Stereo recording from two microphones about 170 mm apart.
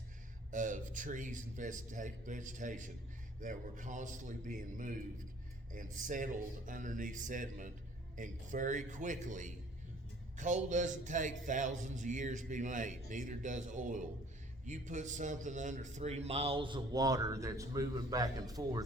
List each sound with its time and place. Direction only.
0.5 s a man's voice: 50° right (ahead or behind); by 18.9 s 20° right (ahead or behind)